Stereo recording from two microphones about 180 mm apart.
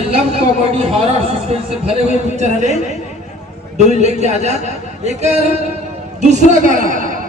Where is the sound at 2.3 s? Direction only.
40° right (ahead or behind).